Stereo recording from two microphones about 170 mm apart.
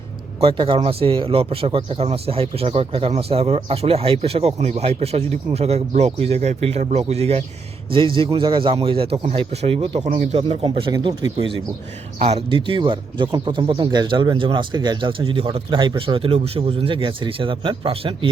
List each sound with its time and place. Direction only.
0.3 s a man's voice: 30° right (ahead or behind)